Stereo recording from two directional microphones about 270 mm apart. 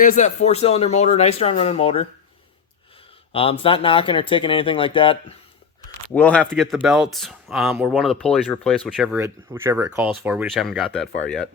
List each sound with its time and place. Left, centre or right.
0.0 s speech: left
3.6 s speech: centre
6.1 s speech: centre